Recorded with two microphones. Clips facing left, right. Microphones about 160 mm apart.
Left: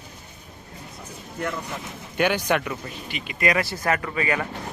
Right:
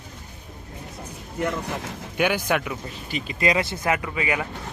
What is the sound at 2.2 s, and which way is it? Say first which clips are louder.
Speech: left 1 dB; 5° right (ahead or behind).